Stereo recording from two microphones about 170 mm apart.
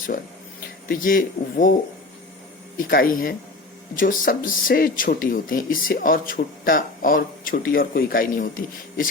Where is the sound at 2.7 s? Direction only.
55° left (ahead or behind).